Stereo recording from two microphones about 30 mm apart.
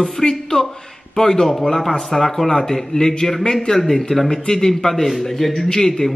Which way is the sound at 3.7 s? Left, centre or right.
Centre.